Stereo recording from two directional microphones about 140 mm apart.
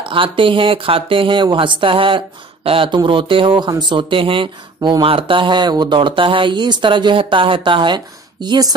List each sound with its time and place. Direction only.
0.0 s speech: 40° right (ahead or behind)